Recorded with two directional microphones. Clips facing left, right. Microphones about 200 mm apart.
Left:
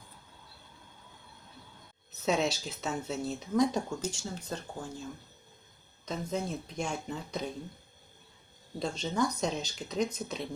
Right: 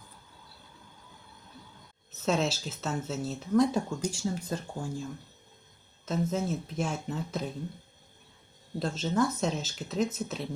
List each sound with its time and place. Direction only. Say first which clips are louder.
2.2 s speech: right 1 dB; centre (ahead or behind)
6.1 s speech: right 4 dB; 5° right (ahead or behind)
8.8 s speech: right 3 dB; 5° right (ahead or behind)